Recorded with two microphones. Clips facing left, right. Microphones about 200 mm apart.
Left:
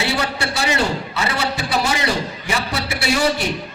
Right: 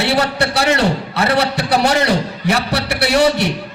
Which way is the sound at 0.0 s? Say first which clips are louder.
Right 6 dB; 65° right (ahead or behind).